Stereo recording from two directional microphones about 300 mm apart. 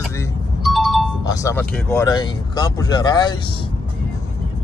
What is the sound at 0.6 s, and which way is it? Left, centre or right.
Music, centre.